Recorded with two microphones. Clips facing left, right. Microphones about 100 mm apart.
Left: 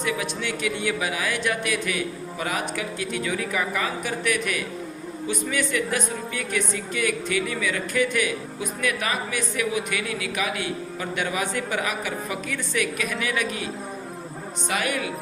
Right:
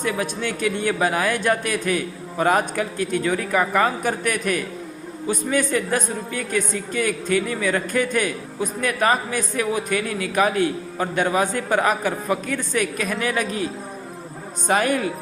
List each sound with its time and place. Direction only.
0.0 s a woman's voice: 45° right (ahead or behind)
14.7 s a woman's voice: 40° right (ahead or behind)